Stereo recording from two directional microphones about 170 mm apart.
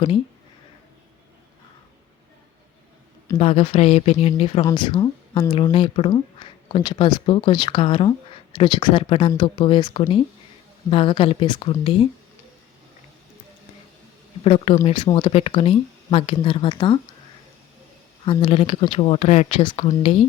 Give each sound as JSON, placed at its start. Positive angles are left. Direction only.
{"t": 3.3, "sound": "speech", "side_deg": 35}
{"t": 4.6, "sound": "speech", "side_deg": 25}
{"t": 14.4, "sound": "speech", "side_deg": 35}
{"t": 18.3, "sound": "speech", "side_deg": 30}